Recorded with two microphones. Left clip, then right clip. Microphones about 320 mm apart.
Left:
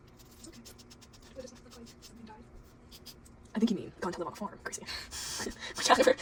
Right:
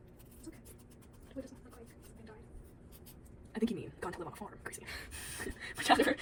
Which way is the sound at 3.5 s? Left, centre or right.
Left.